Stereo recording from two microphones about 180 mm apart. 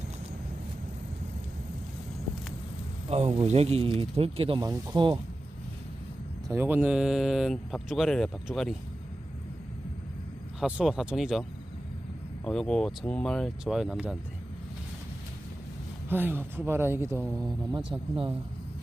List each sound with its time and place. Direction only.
3.1 s speech: 35° right (ahead or behind)
6.5 s speech: 10° right (ahead or behind)
10.6 s speech: centre (ahead or behind)
12.4 s speech: 5° left (ahead or behind)
16.1 s speech: 10° right (ahead or behind)